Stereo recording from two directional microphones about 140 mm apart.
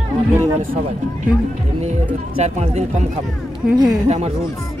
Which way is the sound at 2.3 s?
50° right (ahead or behind).